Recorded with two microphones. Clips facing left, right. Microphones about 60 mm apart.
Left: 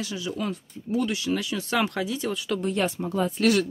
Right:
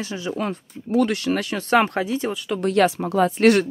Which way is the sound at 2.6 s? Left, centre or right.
Right.